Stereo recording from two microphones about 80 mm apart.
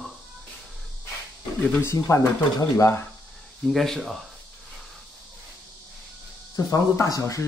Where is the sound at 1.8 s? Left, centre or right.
Left.